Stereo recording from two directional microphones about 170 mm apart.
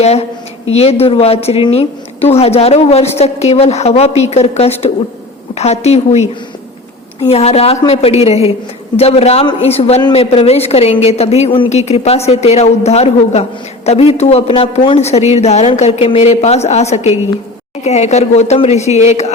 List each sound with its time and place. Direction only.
0.0 s a woman's voice: 40° left (ahead or behind)